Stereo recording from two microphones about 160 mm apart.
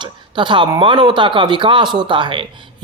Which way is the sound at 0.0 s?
30° right (ahead or behind).